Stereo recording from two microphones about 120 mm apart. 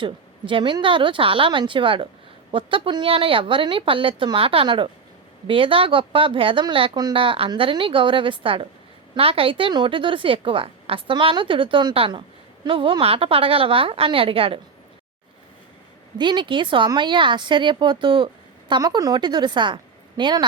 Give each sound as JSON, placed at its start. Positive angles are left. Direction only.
{"t": 0.0, "sound": "speech", "side_deg": -45}
{"t": 16.1, "sound": "a woman's voice", "side_deg": -40}